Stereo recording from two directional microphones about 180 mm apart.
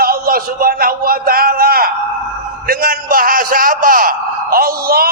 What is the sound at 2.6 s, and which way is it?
A man's voice, 55° right (ahead or behind).